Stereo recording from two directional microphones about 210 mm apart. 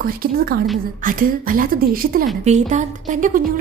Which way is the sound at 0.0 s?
45° right (ahead or behind).